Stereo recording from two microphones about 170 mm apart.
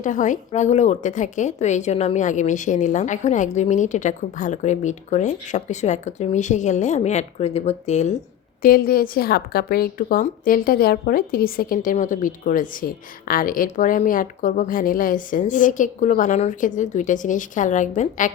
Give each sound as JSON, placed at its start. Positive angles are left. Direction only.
{"t": 0.0, "sound": "a woman's voice", "side_deg": 50}
{"t": 8.6, "sound": "a woman's voice", "side_deg": 60}